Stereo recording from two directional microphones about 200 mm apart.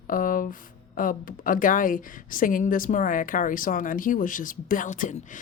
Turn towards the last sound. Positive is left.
turn(degrees=40)  # may be behind; listen again after turning